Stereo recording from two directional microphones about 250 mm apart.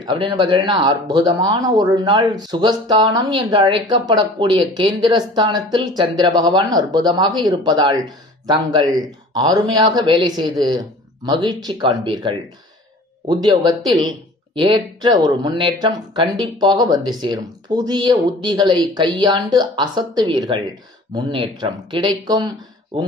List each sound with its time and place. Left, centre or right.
0.0 s speech: centre
9.3 s speech: centre